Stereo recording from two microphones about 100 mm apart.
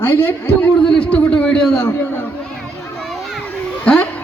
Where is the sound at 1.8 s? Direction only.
25° left (ahead or behind).